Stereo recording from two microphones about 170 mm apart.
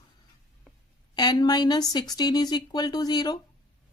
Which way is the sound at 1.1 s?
25° left (ahead or behind).